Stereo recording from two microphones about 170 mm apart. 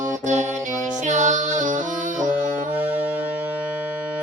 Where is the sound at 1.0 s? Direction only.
45° right (ahead or behind).